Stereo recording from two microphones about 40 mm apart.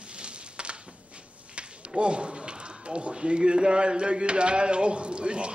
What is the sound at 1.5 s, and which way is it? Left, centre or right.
A man's voice, right.